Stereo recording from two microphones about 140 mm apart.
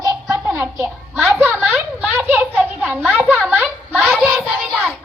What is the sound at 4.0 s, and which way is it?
Child singing, centre (ahead or behind).